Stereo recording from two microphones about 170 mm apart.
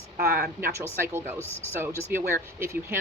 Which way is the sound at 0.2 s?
60° right (ahead or behind).